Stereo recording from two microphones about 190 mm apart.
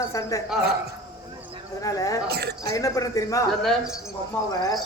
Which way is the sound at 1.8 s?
20° left (ahead or behind).